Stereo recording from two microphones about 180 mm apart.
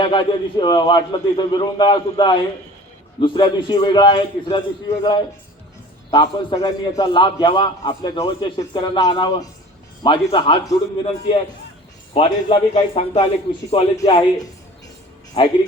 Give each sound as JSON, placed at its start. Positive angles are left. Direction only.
{"t": 0.0, "sound": "a man's voice", "side_deg": 25}
{"t": 6.1, "sound": "a man's voice", "side_deg": 25}
{"t": 12.1, "sound": "a man's voice", "side_deg": 30}
{"t": 15.3, "sound": "speech", "side_deg": 35}